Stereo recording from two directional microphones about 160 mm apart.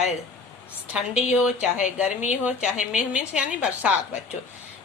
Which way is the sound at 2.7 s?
50° left (ahead or behind).